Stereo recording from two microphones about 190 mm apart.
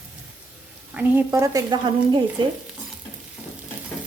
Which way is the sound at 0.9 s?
15° right (ahead or behind).